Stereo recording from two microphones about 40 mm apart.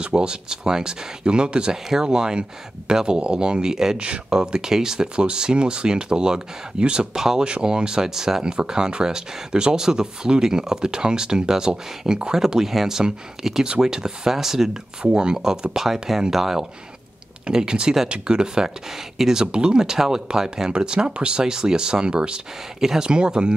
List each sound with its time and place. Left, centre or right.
0.0 s speech: right
7.2 s speech: centre
14.7 s speech: right
19.4 s speech: right
22.8 s speech: centre
23.0 s speech: right